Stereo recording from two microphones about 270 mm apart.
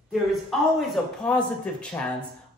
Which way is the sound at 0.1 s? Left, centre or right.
Centre.